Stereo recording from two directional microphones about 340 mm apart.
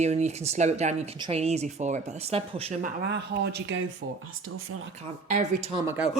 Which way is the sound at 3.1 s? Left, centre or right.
Right.